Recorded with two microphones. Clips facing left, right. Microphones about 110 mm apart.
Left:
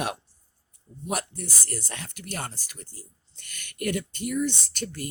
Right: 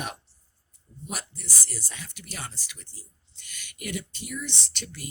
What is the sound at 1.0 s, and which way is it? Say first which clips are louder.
Speech: left 8 dB; 55° left (ahead or behind).